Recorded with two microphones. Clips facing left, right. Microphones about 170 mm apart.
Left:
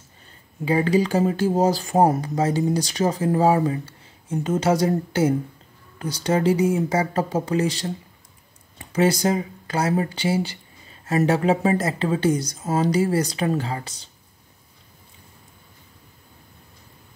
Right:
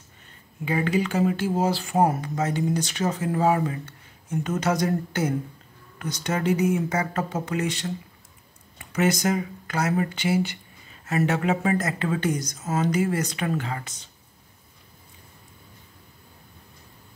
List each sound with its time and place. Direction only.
0.7 s speech: 35° left (ahead or behind)